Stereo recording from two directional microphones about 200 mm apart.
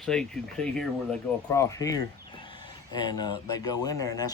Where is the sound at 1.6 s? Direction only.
15° left (ahead or behind).